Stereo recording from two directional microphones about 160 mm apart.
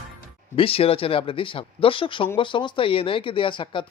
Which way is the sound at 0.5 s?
35° left (ahead or behind).